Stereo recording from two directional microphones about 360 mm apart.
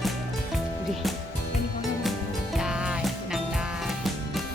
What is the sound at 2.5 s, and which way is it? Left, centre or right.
Music, centre.